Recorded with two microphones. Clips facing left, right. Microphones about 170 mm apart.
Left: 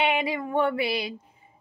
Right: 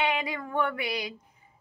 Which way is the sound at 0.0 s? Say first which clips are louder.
Left 4 dB; 25° left (ahead or behind).